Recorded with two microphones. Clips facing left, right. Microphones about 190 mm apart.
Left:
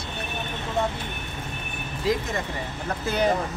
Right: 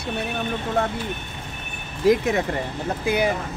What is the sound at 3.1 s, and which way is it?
Speech, 10° right (ahead or behind).